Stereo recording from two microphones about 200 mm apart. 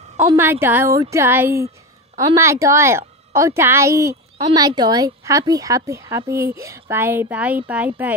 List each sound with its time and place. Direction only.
0.4 s speech: 10° right (ahead or behind)